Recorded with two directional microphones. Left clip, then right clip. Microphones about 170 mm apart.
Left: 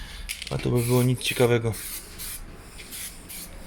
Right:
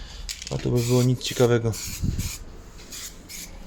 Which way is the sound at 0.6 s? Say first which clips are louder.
Right 1 dB; 15° right (ahead or behind).